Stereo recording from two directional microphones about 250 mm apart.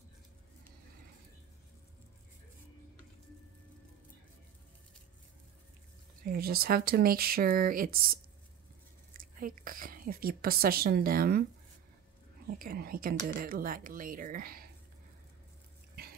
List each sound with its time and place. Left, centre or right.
6.2 s speech: right
12.5 s speech: right